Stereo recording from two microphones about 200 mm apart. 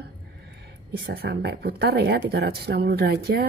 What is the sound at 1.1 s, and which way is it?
Speech, 55° right (ahead or behind).